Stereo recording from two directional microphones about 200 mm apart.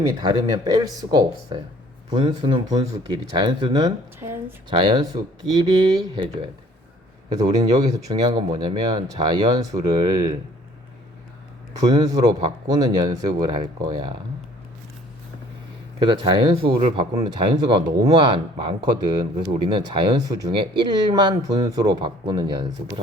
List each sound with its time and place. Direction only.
0.0 s speech: 20° right (ahead or behind)
7.3 s speech: 20° right (ahead or behind)
11.7 s speech: 20° right (ahead or behind)
16.0 s speech: 25° right (ahead or behind)